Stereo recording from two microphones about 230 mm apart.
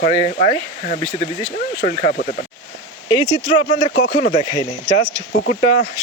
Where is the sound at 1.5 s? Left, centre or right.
Left.